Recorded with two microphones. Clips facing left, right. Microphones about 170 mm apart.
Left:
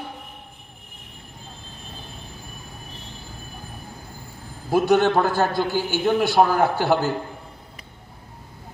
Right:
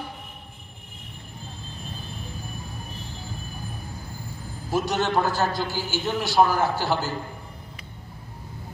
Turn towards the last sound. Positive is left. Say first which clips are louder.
# left 5 dB
turn(degrees=60)  # may be behind; listen again after turning